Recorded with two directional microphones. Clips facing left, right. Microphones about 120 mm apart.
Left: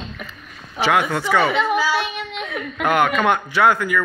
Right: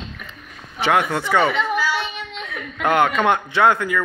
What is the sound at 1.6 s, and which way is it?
Child singing, 60° left (ahead or behind).